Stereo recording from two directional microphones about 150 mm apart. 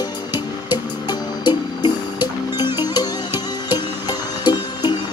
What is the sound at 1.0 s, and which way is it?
Music, 30° left (ahead or behind).